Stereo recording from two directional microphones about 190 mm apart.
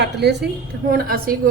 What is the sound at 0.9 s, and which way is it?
Speech, 50° right (ahead or behind).